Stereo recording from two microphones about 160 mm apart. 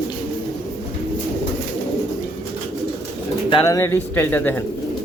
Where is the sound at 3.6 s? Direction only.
20° left (ahead or behind).